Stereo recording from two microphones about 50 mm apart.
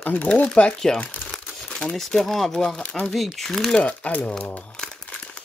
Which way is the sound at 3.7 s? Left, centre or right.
Left.